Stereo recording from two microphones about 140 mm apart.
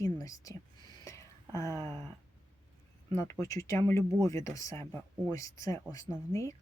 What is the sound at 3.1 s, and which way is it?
Speech, 20° left (ahead or behind).